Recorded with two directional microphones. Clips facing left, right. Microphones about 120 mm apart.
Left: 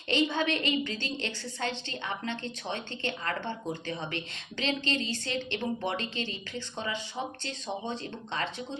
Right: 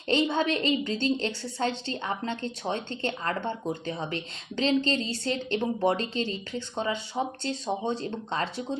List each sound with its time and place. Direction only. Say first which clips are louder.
0.1 s a woman's voice: right 3 dB; 35° right (ahead or behind)